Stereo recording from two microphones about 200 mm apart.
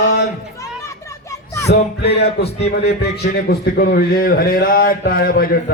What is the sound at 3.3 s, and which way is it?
A man's voice, 50° left (ahead or behind).